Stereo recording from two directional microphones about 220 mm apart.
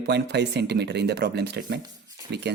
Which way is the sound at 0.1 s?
50° right (ahead or behind).